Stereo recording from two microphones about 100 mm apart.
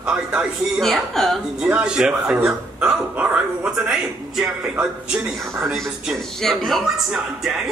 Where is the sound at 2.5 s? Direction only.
10° right (ahead or behind).